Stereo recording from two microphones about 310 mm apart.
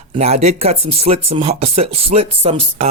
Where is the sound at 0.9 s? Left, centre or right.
Centre.